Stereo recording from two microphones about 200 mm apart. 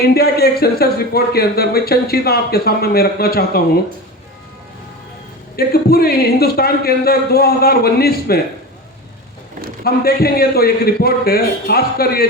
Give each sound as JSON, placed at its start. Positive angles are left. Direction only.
{"t": 0.0, "sound": "speech", "side_deg": 50}
{"t": 5.5, "sound": "speech", "side_deg": 50}
{"t": 9.8, "sound": "speech", "side_deg": 50}